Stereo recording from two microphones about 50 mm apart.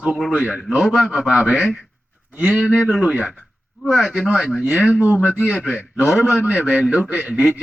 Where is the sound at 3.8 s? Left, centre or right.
Centre.